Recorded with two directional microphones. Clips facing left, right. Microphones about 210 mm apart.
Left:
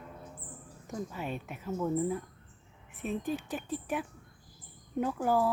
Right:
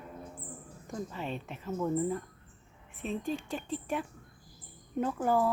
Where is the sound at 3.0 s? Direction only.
15° left (ahead or behind).